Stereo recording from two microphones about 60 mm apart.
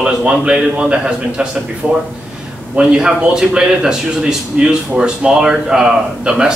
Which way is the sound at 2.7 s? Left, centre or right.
Centre.